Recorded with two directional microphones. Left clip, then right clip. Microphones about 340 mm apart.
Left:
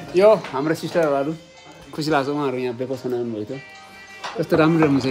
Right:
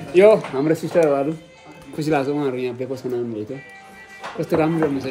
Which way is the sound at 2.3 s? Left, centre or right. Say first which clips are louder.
Even; centre.